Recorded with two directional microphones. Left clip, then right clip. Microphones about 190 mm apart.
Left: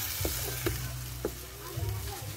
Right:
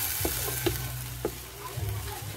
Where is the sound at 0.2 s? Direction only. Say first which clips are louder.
Right 4 dB; 25° right (ahead or behind).